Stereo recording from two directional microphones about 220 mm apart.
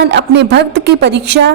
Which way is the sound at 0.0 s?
50° right (ahead or behind).